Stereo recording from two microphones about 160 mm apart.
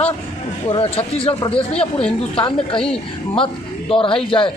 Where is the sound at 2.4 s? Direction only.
30° left (ahead or behind).